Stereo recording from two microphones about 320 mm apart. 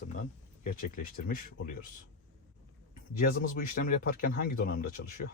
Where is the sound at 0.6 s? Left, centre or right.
Left.